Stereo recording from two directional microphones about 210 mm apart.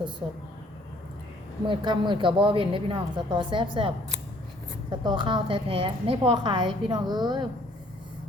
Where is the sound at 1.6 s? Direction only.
20° right (ahead or behind).